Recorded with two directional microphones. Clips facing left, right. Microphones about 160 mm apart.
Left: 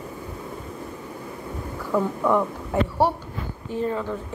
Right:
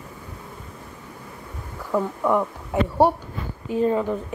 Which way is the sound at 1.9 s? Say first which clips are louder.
Even; 5° right (ahead or behind).